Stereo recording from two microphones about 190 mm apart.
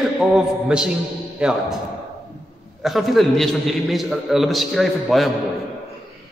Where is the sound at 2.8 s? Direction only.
Centre (ahead or behind).